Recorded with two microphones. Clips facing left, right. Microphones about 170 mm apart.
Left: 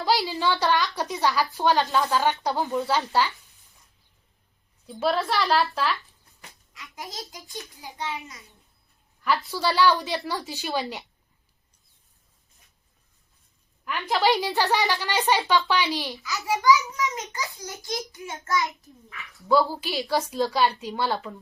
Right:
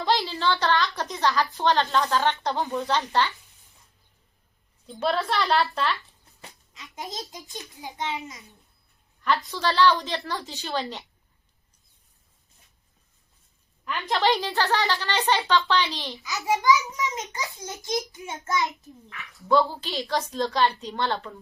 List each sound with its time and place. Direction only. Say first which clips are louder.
0.0 s a sound: left 1 dB; 5° left (ahead or behind)
0.3 s a woman's voice: even; 10° left (ahead or behind)
4.9 s speech: left 1 dB; centre (ahead or behind)
6.7 s a child's voice: right 2 dB; 20° right (ahead or behind)
9.5 s a woman's voice: even; 10° left (ahead or behind)
13.8 s a woman's voice: left 1 dB; 5° left (ahead or behind)
16.1 s a child's voice: right 2 dB; 20° right (ahead or behind)
19.2 s a woman's voice: even; 5° left (ahead or behind)